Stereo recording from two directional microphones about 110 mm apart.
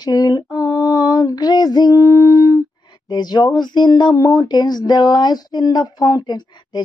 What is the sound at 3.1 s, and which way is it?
Speech, 40° left (ahead or behind).